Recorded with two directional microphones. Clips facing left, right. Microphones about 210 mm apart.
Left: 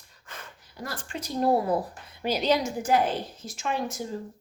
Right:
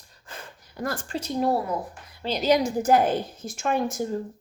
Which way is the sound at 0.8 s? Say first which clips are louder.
Right 7 dB; 50° right (ahead or behind).